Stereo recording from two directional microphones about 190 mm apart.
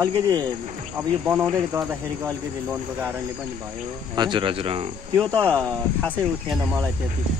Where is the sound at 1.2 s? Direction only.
10° right (ahead or behind).